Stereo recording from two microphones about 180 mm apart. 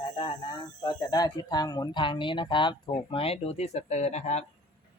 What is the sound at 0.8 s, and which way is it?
Speech, 20° left (ahead or behind).